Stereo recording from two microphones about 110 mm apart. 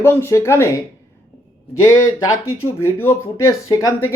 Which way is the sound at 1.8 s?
25° left (ahead or behind).